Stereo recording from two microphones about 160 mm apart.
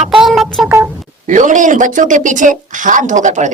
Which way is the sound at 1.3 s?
50° right (ahead or behind).